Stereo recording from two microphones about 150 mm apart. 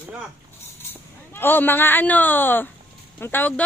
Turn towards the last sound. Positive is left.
turn(degrees=15)  # may be behind; listen again after turning